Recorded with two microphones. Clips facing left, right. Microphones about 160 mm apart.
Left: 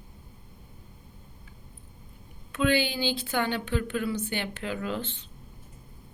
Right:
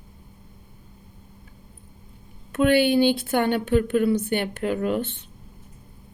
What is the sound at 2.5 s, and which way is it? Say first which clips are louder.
Speech: right 7 dB; 50° right (ahead or behind).